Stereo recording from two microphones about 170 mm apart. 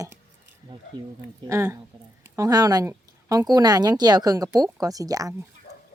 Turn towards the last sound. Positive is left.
turn(degrees=-20)  # may be behind; listen again after turning